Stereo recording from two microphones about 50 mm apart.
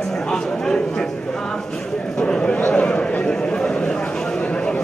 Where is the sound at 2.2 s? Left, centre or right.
Left.